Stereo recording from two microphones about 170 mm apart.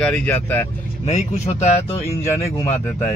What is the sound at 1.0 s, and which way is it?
Speech, 45° left (ahead or behind).